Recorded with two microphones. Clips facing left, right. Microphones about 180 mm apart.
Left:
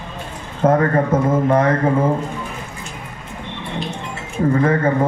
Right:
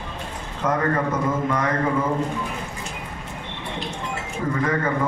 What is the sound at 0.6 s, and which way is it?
Speech, 55° left (ahead or behind).